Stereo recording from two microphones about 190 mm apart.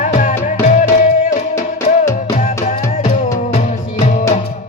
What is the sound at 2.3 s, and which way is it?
Music, 40° left (ahead or behind).